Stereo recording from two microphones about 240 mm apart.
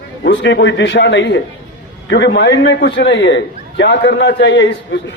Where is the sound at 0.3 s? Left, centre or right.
Left.